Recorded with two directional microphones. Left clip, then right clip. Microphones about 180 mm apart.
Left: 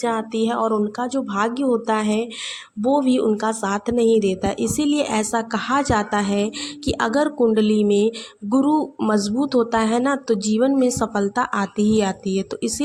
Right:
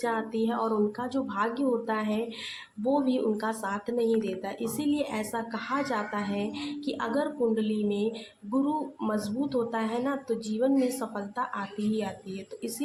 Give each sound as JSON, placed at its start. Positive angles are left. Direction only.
{"t": 0.0, "sound": "speech", "side_deg": 40}